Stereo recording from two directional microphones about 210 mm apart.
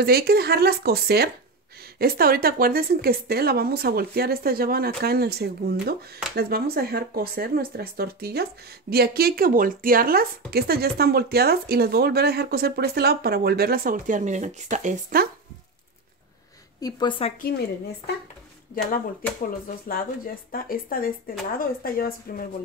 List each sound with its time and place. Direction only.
0.0 s speech: 50° right (ahead or behind)
16.8 s a woman's voice: 25° left (ahead or behind)
19.7 s speech: 45° left (ahead or behind)